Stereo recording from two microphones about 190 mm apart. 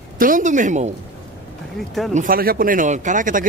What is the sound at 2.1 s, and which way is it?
Speech, 45° right (ahead or behind).